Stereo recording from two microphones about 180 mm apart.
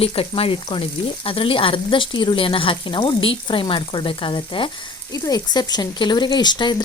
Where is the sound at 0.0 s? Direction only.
30° left (ahead or behind).